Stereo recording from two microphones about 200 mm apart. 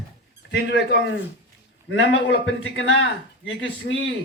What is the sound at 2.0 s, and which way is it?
A man's voice, 70° left (ahead or behind).